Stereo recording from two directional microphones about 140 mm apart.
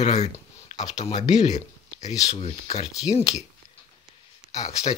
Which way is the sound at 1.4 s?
55° left (ahead or behind).